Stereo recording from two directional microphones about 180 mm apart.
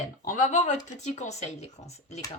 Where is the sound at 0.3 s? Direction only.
45° left (ahead or behind).